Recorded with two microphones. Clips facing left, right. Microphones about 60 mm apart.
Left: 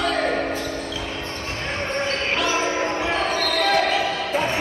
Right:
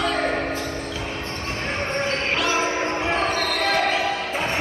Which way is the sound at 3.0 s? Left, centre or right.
Right.